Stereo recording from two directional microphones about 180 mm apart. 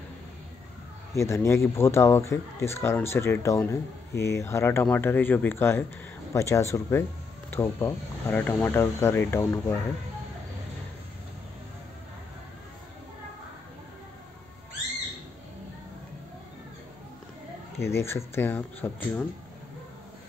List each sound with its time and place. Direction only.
1.1 s speech: 15° left (ahead or behind)
17.7 s speech: 15° left (ahead or behind)